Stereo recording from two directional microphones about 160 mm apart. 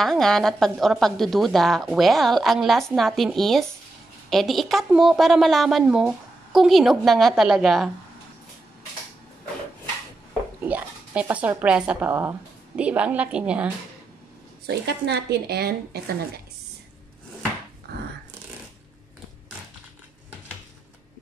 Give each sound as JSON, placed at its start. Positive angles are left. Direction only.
{"t": 0.0, "sound": "a woman's voice", "side_deg": 0}
{"t": 10.6, "sound": "speech", "side_deg": -10}
{"t": 14.7, "sound": "speech", "side_deg": -90}